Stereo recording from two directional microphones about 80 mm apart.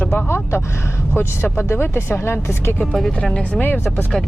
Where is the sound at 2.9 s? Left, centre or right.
Centre.